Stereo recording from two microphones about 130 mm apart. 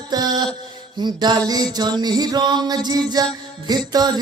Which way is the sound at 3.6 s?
30° right (ahead or behind).